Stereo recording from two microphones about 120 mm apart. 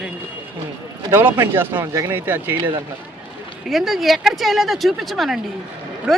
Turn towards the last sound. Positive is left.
turn(degrees=0)  # may be behind; listen again after turning